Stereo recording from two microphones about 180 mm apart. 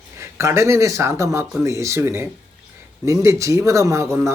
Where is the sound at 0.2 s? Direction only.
15° right (ahead or behind).